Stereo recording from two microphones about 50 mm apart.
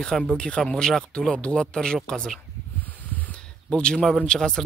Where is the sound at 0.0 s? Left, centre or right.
Centre.